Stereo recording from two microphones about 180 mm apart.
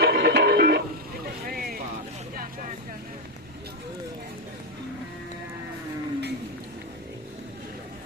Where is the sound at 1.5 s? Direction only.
55° right (ahead or behind).